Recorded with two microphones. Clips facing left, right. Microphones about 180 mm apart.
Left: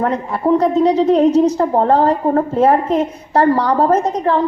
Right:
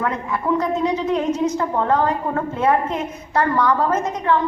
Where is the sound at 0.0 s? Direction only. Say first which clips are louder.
Left 6 dB; 35° left (ahead or behind).